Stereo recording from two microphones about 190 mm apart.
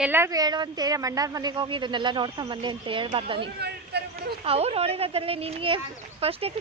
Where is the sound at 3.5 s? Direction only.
60° right (ahead or behind).